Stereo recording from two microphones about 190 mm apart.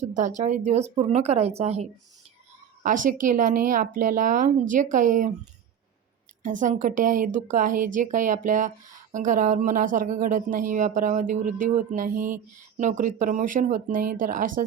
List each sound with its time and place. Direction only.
0.0 s speech: 40° right (ahead or behind)
2.8 s speech: 45° right (ahead or behind)
6.4 s speech: 40° right (ahead or behind)